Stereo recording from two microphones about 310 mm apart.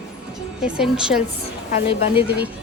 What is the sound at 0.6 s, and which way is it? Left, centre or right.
Speech, centre.